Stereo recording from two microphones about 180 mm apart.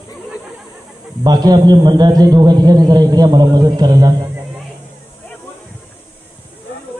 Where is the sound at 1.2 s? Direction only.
20° right (ahead or behind).